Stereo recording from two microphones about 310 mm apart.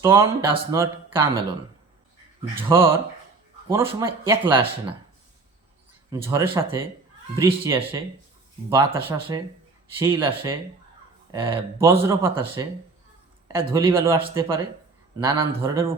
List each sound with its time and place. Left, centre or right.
0.0 s speech: centre
2.6 s speech: centre
6.1 s speech: centre